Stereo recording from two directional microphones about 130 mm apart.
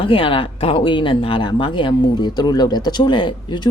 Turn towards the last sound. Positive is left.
turn(degrees=35)  # may be behind; listen again after turning